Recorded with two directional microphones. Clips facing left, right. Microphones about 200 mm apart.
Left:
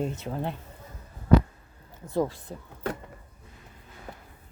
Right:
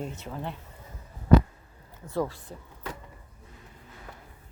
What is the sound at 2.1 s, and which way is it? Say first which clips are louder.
Speech: left 3 dB; 20° left (ahead or behind).